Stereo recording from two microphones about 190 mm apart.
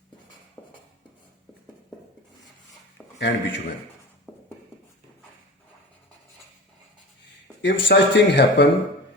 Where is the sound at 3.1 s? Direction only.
70° left (ahead or behind).